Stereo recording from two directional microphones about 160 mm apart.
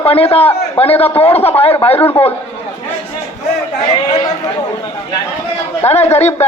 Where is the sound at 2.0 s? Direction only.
15° left (ahead or behind).